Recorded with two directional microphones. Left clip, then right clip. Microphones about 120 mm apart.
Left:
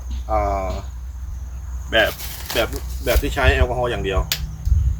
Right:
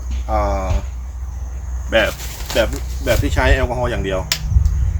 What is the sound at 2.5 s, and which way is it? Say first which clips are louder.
Speech: right 4 dB; 25° left (ahead or behind).